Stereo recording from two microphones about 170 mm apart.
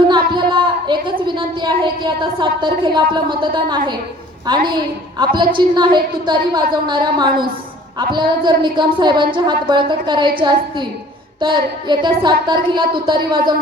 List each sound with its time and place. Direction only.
0.1 s a woman's voice: 30° right (ahead or behind)
11.3 s a woman's voice: 25° right (ahead or behind)